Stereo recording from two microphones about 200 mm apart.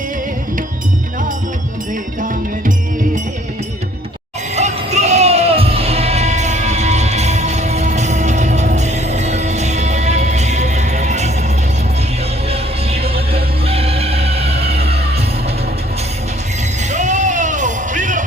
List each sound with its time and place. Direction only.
2.2 s music: 40° right (ahead or behind)
4.5 s music: 35° right (ahead or behind)
12.5 s music: 30° right (ahead or behind)
16.9 s music: 35° right (ahead or behind)